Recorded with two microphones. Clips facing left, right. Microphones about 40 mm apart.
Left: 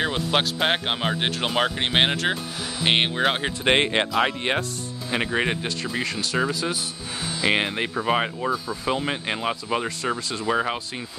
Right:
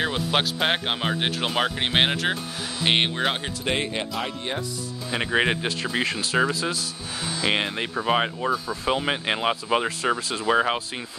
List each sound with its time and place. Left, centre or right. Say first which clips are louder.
0.0 s speech: left 1 dB; centre
3.6 s speech: left 6 dB; left
3.9 s speech: left 7 dB; left
5.3 s speech: right 5 dB; centre
6.1 s speech: right 1 dB; centre
7.5 s speech: left 2 dB; centre
7.9 s speech: right 2 dB; centre
8.9 s speech: right 3 dB; centre